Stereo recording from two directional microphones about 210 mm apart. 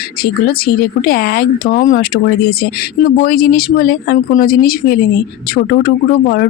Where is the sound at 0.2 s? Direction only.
45° left (ahead or behind).